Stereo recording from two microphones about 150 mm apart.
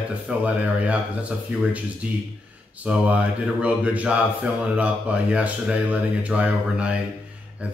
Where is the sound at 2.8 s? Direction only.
10° right (ahead or behind).